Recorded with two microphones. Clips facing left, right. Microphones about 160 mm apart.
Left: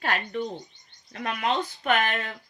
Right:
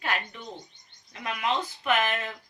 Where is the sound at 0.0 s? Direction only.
50° left (ahead or behind).